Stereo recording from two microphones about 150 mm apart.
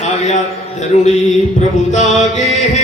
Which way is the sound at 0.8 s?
50° left (ahead or behind).